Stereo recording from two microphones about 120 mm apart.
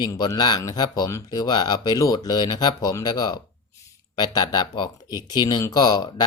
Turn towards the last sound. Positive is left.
turn(degrees=35)  # may be behind; listen again after turning